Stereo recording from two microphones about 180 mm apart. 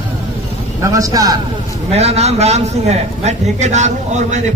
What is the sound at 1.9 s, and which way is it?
A woman's voice, 35° right (ahead or behind).